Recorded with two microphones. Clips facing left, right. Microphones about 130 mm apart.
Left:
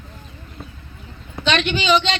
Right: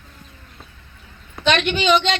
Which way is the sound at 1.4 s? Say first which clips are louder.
Right 1 dB; 55° right (ahead or behind).